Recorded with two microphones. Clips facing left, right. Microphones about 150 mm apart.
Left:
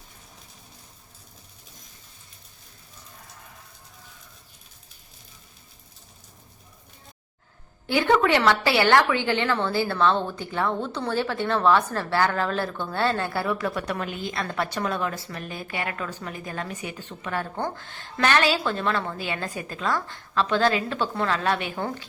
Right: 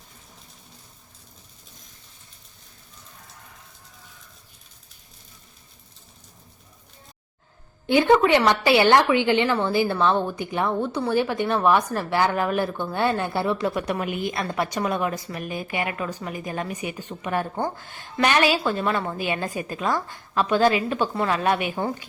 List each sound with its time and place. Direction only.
7.9 s a woman's voice: 20° right (ahead or behind)